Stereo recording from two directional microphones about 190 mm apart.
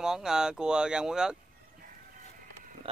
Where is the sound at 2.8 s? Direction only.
30° right (ahead or behind).